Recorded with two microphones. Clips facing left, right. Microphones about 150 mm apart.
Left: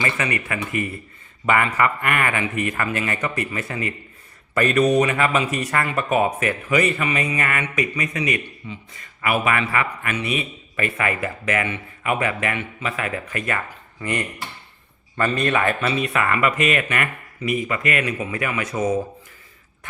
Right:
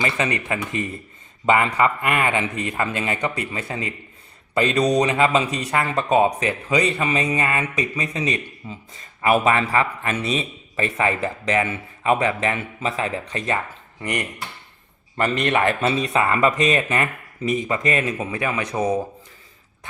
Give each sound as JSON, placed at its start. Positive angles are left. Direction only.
{"t": 0.0, "sound": "a man's voice", "side_deg": -25}
{"t": 5.8, "sound": "a man's voice", "side_deg": -30}
{"t": 8.6, "sound": "speech", "side_deg": -40}
{"t": 9.2, "sound": "a man's voice", "side_deg": -25}
{"t": 15.4, "sound": "a man's voice", "side_deg": -25}